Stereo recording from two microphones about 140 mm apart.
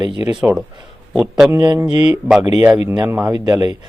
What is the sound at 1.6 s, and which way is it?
Speech, 25° right (ahead or behind).